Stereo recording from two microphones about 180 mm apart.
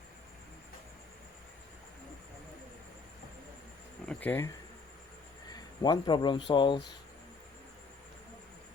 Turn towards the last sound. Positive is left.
turn(degrees=25)  # may be behind; listen again after turning